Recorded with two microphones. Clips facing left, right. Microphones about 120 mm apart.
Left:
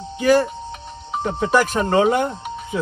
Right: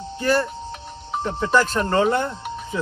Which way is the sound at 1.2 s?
15° left (ahead or behind).